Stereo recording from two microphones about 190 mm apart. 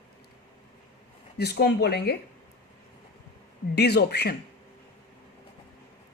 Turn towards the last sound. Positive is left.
turn(degrees=60)  # may be behind; listen again after turning